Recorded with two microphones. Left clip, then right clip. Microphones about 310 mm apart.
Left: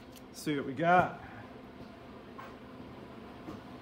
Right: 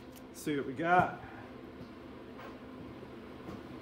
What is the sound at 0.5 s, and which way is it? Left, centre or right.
Speech, centre.